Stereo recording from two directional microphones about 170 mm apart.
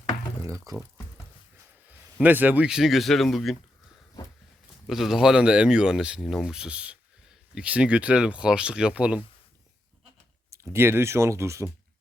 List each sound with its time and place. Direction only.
0.7 s speech: 20° right (ahead or behind)
1.9 s speech: 10° right (ahead or behind)
4.9 s speech: centre (ahead or behind)
10.5 s speech: 15° right (ahead or behind)